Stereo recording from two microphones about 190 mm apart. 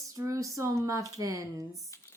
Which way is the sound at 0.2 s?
15° right (ahead or behind).